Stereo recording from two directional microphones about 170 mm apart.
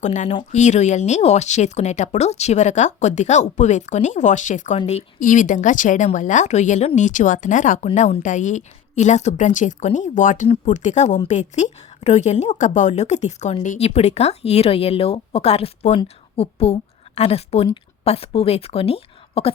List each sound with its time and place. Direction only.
0.0 s a woman's voice: 45° left (ahead or behind)